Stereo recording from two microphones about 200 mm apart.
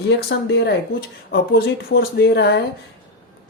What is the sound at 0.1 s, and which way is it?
Speech, 55° left (ahead or behind).